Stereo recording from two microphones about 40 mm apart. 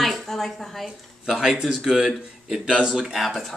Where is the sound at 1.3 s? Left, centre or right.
Centre.